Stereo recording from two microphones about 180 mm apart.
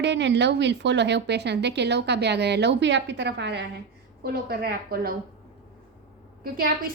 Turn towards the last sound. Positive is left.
turn(degrees=-55)  # may be behind; listen again after turning